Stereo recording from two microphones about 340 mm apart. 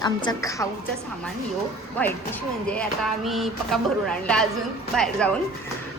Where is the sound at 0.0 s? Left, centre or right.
Centre.